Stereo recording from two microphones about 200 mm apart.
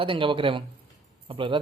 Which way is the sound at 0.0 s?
25° right (ahead or behind).